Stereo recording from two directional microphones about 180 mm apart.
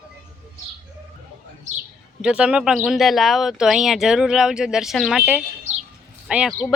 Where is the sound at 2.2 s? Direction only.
5° right (ahead or behind).